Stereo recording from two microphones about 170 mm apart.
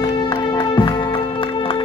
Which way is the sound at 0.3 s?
25° left (ahead or behind).